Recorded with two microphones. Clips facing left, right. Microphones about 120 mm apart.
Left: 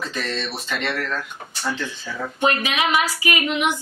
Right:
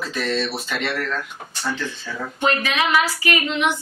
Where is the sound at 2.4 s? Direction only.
15° left (ahead or behind).